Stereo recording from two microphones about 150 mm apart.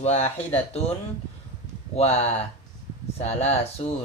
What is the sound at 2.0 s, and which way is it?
Speech, 45° left (ahead or behind).